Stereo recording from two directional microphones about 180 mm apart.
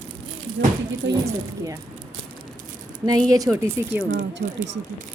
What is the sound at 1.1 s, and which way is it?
Speech, 20° right (ahead or behind).